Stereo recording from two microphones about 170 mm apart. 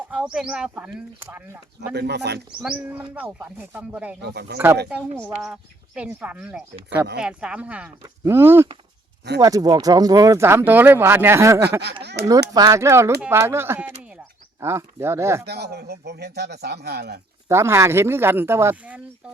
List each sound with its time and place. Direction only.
0.0 s speech: 5° right (ahead or behind)
1.9 s speech: 80° right
2.6 s speech: 10° right (ahead or behind)
4.2 s speech: 75° right (ahead or behind)
4.5 s speech: 15° right (ahead or behind)
12.2 s speech: 75° right (ahead or behind)
12.5 s speech: 20° right (ahead or behind)
15.4 s speech: 75° right (ahead or behind)
17.5 s speech: 15° right (ahead or behind)